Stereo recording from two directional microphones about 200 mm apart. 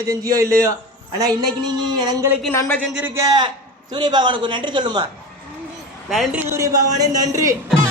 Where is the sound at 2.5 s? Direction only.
10° left (ahead or behind).